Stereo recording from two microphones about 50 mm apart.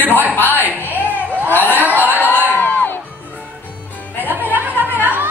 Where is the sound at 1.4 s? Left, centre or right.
Left.